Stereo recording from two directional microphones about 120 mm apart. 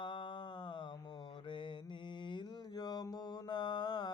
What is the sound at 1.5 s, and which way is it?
Mantra, 45° left (ahead or behind).